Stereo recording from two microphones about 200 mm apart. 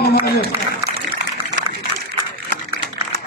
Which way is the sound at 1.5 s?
55° right (ahead or behind).